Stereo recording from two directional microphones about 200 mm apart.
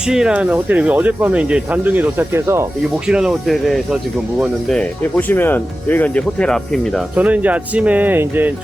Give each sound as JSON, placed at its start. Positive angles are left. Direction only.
{"t": 0.1, "sound": "speech", "side_deg": -5}
{"t": 7.2, "sound": "speech", "side_deg": -5}